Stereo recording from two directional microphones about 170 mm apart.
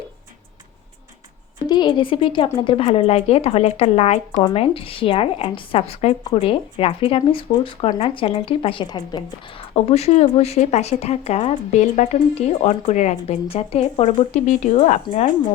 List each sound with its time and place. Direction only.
1.6 s a woman's voice: 25° left (ahead or behind)
9.7 s a woman's voice: 40° left (ahead or behind)